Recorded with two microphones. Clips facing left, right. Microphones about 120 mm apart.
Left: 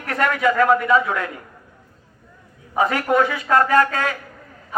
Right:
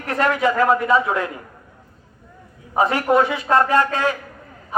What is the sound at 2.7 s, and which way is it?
A man's voice, 25° right (ahead or behind).